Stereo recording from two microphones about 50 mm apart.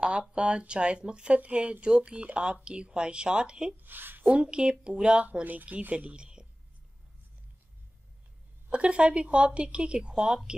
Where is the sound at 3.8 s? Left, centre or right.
Right.